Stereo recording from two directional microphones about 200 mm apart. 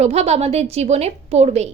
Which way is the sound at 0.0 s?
35° right (ahead or behind).